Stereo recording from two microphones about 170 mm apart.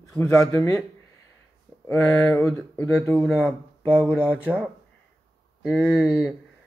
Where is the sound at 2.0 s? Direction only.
Centre (ahead or behind).